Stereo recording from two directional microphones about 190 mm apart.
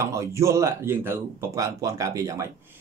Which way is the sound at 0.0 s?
15° right (ahead or behind).